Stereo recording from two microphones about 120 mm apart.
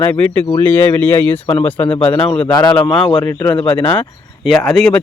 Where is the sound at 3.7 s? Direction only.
15° left (ahead or behind).